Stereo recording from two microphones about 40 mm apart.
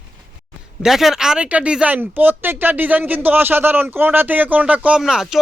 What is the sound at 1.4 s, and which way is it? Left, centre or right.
Speech, right.